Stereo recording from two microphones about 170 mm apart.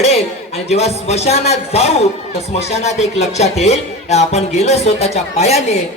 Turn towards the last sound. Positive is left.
turn(degrees=40)  # may be behind; listen again after turning